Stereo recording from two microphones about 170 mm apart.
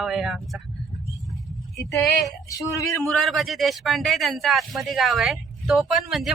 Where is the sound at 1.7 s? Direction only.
20° left (ahead or behind).